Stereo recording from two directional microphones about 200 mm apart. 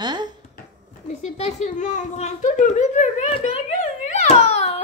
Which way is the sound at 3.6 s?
35° left (ahead or behind).